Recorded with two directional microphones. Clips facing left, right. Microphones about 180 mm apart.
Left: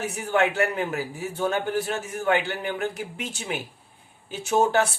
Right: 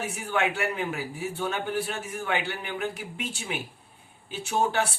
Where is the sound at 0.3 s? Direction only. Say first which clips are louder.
Left 5 dB; 40° left (ahead or behind).